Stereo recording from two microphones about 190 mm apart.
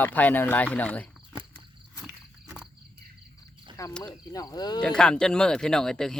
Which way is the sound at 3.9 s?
5° left (ahead or behind).